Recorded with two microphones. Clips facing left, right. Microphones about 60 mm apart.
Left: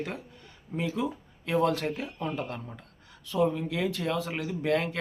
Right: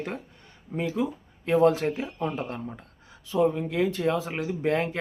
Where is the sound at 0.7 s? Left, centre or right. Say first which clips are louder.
Right 3 dB; centre.